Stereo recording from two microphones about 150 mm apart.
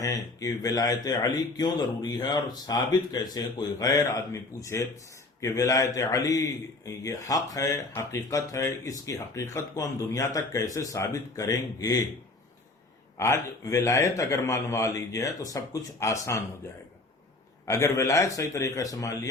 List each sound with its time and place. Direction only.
0.0 s a man's voice: 20° left (ahead or behind)
13.1 s a man's voice: 20° left (ahead or behind)
17.7 s a man's voice: 20° left (ahead or behind)